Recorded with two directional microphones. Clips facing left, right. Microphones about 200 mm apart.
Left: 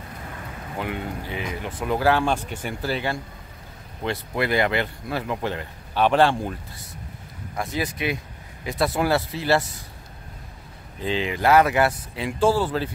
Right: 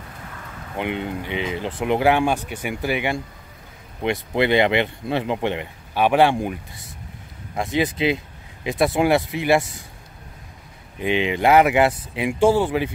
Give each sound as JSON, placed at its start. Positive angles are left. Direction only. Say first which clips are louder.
{"t": 0.7, "sound": "speech", "louder": "right 4 dB", "side_deg": -20}
{"t": 11.0, "sound": "speech", "louder": "right 4 dB", "side_deg": -20}